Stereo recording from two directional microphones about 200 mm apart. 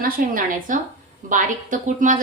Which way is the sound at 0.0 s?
45° right (ahead or behind).